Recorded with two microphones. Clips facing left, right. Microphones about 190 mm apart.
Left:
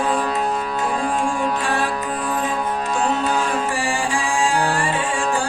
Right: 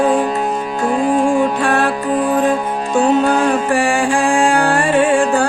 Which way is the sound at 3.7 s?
60° right (ahead or behind).